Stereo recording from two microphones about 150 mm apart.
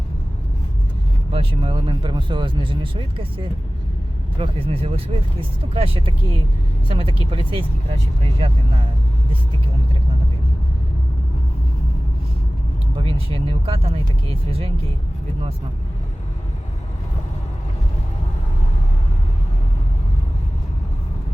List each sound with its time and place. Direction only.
1.3 s speech: 35° right (ahead or behind)
13.0 s speech: 40° right (ahead or behind)